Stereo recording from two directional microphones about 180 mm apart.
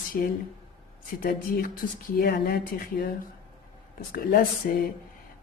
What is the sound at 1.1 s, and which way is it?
Speech, 50° left (ahead or behind).